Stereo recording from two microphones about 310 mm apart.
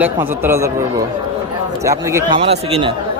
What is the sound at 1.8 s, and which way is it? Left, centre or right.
Speech, centre.